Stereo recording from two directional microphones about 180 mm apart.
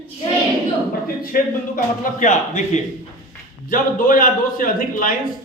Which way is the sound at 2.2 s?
40° left (ahead or behind).